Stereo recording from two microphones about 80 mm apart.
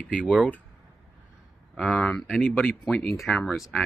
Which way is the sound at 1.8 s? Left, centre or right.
Centre.